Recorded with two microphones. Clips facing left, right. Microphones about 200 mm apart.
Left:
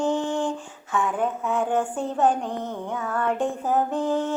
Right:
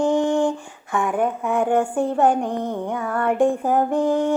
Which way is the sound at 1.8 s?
15° right (ahead or behind).